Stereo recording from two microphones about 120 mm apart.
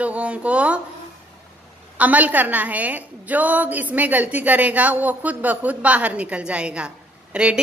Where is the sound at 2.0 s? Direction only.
10° right (ahead or behind).